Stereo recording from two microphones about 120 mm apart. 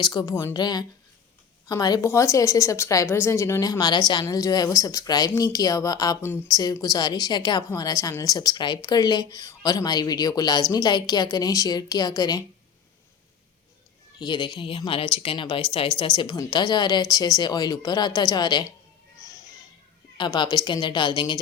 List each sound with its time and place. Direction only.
0.0 s a woman's voice: 35° left (ahead or behind)
2.0 s speech: 25° left (ahead or behind)
7.7 s speech: 30° left (ahead or behind)
14.2 s speech: 40° left (ahead or behind)
20.1 s speech: 40° left (ahead or behind)